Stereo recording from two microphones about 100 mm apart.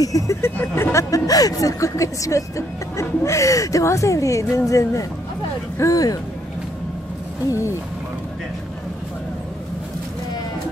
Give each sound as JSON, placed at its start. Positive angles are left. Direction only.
{"t": 0.0, "sound": "speech", "side_deg": 35}
{"t": 0.4, "sound": "speech", "side_deg": 25}